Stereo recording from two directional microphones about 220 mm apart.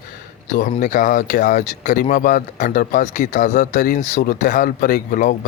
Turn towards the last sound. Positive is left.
turn(degrees=35)  # may be behind; listen again after turning